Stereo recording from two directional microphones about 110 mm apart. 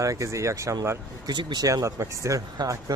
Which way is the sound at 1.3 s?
40° right (ahead or behind).